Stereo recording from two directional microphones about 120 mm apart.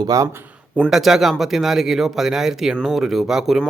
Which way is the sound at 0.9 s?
5° right (ahead or behind).